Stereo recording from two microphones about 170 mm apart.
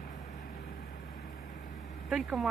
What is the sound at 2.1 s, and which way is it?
Speech, 5° right (ahead or behind).